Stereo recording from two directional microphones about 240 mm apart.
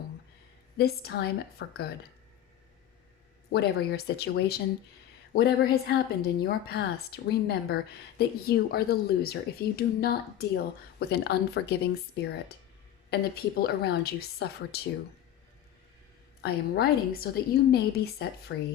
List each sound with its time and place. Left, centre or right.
0.8 s a woman's voice: left
3.5 s a woman's voice: left
16.4 s a woman's voice: left